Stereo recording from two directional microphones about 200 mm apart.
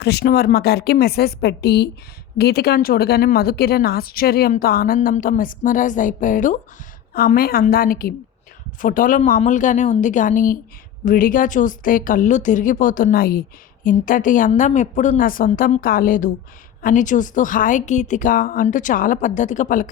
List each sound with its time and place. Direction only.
0.0 s a woman's voice: 55° left (ahead or behind)